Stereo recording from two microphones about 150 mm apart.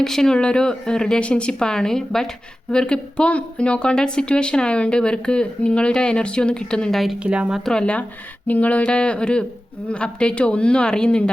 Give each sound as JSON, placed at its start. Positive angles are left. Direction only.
{"t": 0.0, "sound": "speech", "side_deg": 5}